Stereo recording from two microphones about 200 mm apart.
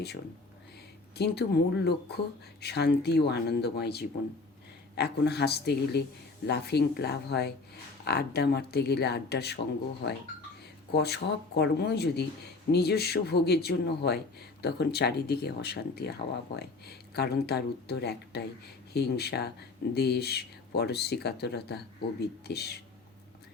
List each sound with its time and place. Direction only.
1.1 s speech: 55° left (ahead or behind)
10.9 s a man's voice: 55° left (ahead or behind)